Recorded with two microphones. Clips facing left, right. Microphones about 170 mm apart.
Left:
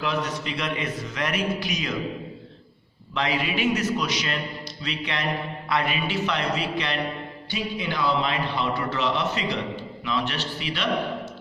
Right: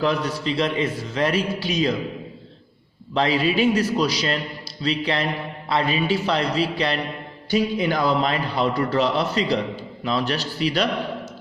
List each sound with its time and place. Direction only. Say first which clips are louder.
0.0 s a man's voice: right 5 dB; 35° right (ahead or behind)
3.2 s a man's voice: right 6 dB; 30° right (ahead or behind)